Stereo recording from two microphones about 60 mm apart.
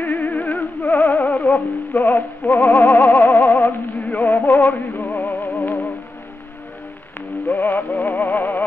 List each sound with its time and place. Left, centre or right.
0.0 s music: left
2.0 s music: left
3.3 s synthetic singing: left
4.0 s music: left
7.5 s music: left